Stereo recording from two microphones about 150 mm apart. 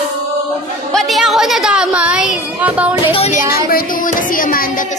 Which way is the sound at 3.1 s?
40° left (ahead or behind).